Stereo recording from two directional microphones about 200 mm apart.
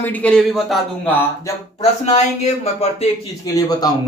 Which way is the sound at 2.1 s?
35° left (ahead or behind).